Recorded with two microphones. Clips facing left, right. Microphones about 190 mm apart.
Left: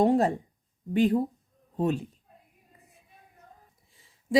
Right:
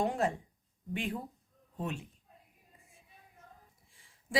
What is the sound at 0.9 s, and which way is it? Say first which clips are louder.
Speech: left 14 dB; 35° left (ahead or behind).